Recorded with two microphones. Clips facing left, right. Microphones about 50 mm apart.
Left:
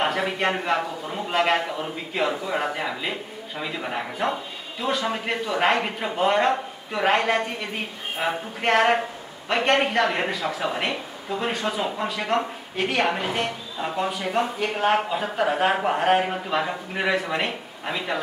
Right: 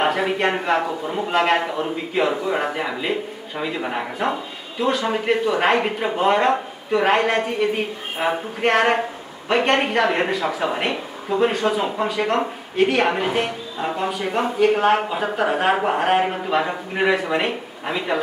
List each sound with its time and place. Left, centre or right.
0.0 s speech: centre
1.3 s a man's voice: centre